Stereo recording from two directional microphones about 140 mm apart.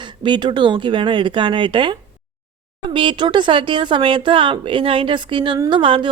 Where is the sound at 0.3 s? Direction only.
35° right (ahead or behind).